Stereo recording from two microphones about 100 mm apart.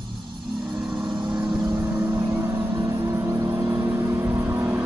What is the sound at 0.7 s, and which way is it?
Vehicle, 10° right (ahead or behind).